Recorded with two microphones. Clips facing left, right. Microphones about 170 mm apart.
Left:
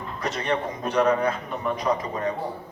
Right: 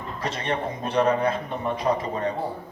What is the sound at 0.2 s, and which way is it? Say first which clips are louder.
A man's voice: left 1 dB; 30° right (ahead or behind).